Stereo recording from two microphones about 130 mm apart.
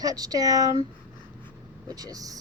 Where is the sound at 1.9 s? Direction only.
30° right (ahead or behind).